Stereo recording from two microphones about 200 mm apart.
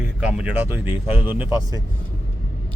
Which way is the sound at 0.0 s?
5° right (ahead or behind).